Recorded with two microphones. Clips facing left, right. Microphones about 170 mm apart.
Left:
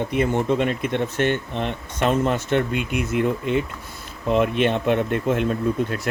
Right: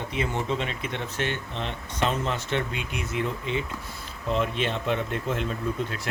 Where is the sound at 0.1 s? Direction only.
55° left (ahead or behind).